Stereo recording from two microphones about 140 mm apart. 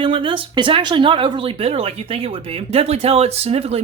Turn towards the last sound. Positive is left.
turn(degrees=-45)  # may be behind; listen again after turning